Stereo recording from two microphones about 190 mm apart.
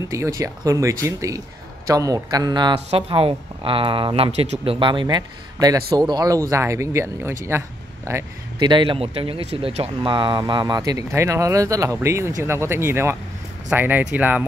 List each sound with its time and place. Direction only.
0.1 s speech: 15° right (ahead or behind)